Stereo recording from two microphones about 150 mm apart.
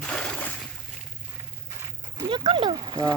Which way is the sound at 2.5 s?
35° right (ahead or behind).